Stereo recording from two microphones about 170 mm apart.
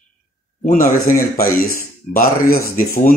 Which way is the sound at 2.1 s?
60° left (ahead or behind).